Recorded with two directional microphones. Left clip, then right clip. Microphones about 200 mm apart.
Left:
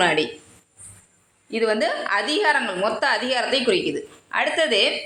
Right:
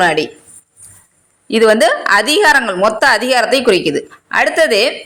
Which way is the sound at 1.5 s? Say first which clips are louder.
Right 12 dB; 45° right (ahead or behind).